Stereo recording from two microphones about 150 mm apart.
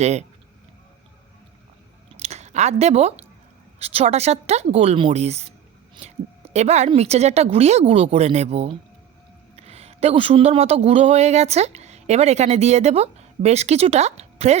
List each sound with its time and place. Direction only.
0.0 s a woman's voice: 45° right (ahead or behind)
2.1 s chewing: 45° right (ahead or behind)
3.8 s a woman's voice: 45° right (ahead or behind)